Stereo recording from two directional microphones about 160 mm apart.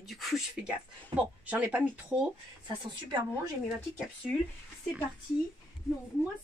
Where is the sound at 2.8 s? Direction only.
25° right (ahead or behind).